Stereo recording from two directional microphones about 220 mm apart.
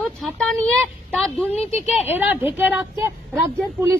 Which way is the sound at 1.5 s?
30° left (ahead or behind).